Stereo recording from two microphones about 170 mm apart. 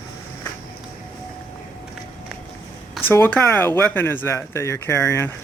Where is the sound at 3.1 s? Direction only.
10° left (ahead or behind).